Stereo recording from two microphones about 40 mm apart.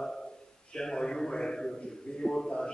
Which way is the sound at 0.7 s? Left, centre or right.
Centre.